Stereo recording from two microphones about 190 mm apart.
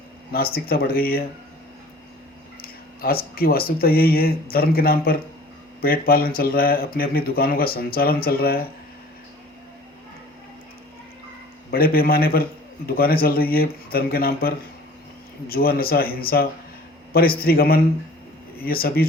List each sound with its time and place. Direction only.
0.3 s speech: 50° left (ahead or behind)
2.6 s speech: 50° left (ahead or behind)
11.7 s speech: 50° left (ahead or behind)